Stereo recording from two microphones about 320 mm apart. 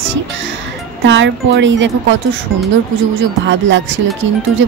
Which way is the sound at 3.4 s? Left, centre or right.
Right.